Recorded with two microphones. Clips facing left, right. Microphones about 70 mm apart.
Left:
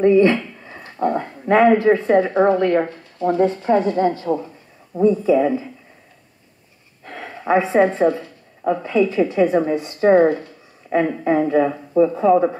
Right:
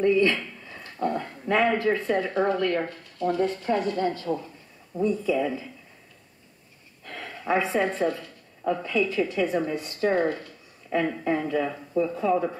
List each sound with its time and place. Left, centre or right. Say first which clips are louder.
0.0 s speech: left 8 dB; left
7.1 s a sound: left 7 dB; left
8.8 s speech: left 9 dB; left